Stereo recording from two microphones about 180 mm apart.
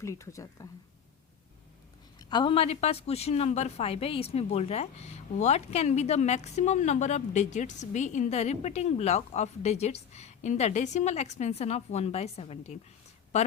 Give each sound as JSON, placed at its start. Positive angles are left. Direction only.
{"t": 0.0, "sound": "a woman's voice", "side_deg": 15}
{"t": 2.3, "sound": "a woman's voice", "side_deg": 30}